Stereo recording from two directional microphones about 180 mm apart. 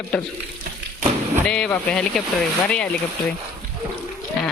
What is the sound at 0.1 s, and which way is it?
Speech, 5° left (ahead or behind).